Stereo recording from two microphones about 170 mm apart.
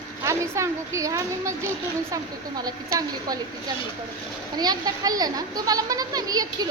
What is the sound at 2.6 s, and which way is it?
Speech, 20° right (ahead or behind).